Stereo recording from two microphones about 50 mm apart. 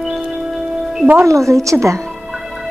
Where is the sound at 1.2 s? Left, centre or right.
Right.